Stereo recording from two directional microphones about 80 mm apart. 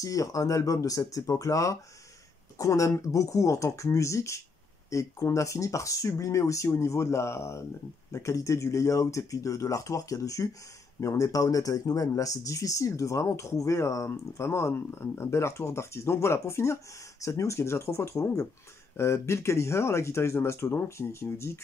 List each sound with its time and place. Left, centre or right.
0.0 s speech: left